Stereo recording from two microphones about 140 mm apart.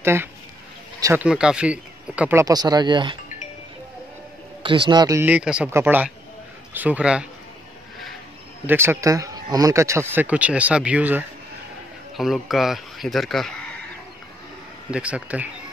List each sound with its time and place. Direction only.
0.0 s speech: 15° right (ahead or behind)
1.2 s speech: 5° right (ahead or behind)
2.4 s speech: 30° right (ahead or behind)
4.6 s speech: 35° right (ahead or behind)
5.2 s speech: 10° right (ahead or behind)
8.6 s speech: 15° right (ahead or behind); by 13.5 s centre (ahead or behind)
14.9 s speech: 10° right (ahead or behind)